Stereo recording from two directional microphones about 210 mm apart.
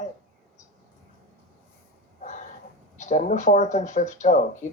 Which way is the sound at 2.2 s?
35° left (ahead or behind).